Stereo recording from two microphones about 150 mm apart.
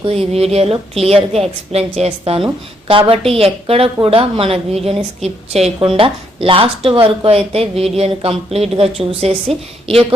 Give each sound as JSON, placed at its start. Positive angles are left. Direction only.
{"t": 0.0, "sound": "a woman's voice", "side_deg": -40}